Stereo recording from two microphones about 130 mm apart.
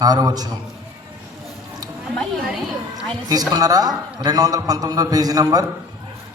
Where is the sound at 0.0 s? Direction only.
30° right (ahead or behind).